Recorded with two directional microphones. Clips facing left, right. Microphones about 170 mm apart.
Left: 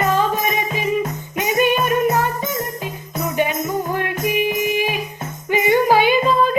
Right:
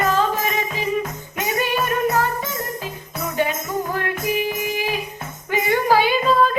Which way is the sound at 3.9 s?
20° left (ahead or behind).